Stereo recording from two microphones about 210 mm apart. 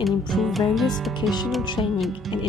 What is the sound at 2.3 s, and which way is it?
Speech, centre (ahead or behind).